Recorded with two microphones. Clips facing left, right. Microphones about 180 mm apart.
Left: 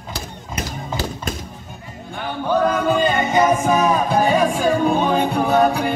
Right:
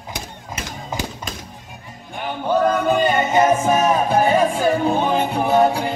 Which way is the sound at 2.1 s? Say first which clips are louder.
Even; 15° right (ahead or behind).